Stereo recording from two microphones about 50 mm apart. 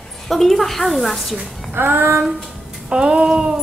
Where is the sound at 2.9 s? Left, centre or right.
Centre.